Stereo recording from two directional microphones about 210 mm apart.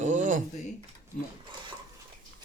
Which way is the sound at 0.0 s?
35° right (ahead or behind).